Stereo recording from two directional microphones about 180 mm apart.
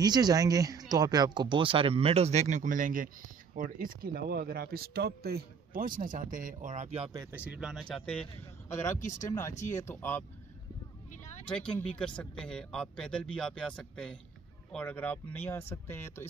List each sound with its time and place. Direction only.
0.0 s speech: 20° right (ahead or behind); by 7.1 s 35° right (ahead or behind)
7.1 s speech: 15° right (ahead or behind); by 8.9 s 15° left (ahead or behind)
9.0 s speech: 45° left (ahead or behind)
9.8 s speech: 10° left (ahead or behind)
11.5 s speech: 5° left (ahead or behind)